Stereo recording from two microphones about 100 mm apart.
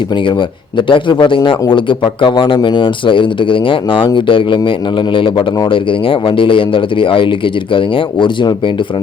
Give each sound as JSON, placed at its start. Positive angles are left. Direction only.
{"t": 0.8, "sound": "a man's voice", "side_deg": 55}